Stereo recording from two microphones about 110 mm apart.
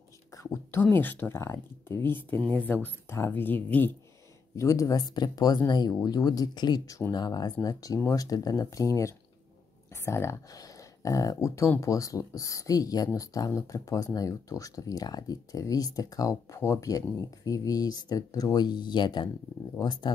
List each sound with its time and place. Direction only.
0.3 s speech: 30° left (ahead or behind)
4.6 s speech: 30° left (ahead or behind)